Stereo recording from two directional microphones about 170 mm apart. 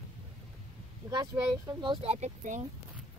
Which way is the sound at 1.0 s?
25° right (ahead or behind).